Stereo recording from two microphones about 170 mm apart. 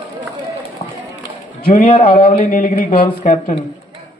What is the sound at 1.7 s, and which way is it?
Speech, 40° left (ahead or behind).